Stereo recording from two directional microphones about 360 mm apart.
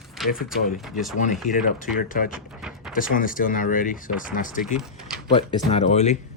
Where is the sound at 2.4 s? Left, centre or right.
Centre.